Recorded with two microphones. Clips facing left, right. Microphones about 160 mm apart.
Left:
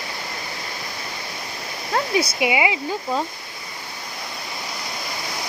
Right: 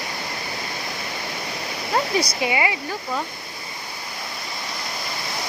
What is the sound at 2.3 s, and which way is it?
Speech, 15° left (ahead or behind).